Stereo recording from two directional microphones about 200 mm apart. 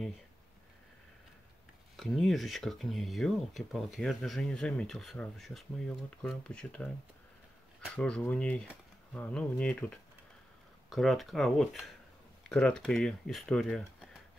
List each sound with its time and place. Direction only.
2.0 s speech: centre (ahead or behind)
7.9 s speech: 5° left (ahead or behind)